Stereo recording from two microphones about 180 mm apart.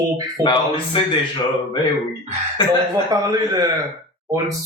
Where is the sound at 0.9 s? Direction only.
30° left (ahead or behind).